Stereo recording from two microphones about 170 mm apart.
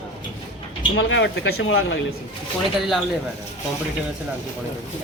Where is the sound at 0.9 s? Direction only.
90° left.